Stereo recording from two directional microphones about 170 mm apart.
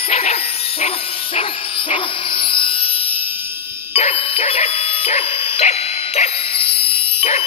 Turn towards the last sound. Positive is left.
turn(degrees=35)  # may be behind; listen again after turning